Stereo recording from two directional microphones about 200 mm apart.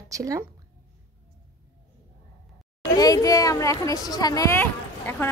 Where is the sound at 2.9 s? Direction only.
20° left (ahead or behind).